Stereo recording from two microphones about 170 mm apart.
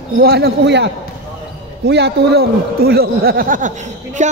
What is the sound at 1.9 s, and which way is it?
A man's voice, 75° right (ahead or behind).